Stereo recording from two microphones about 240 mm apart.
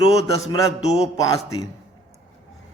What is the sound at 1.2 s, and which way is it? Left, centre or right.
Speech, centre.